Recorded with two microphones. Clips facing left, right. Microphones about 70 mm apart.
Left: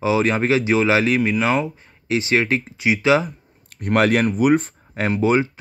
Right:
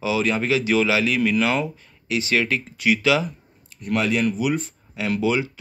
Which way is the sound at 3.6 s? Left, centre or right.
Left.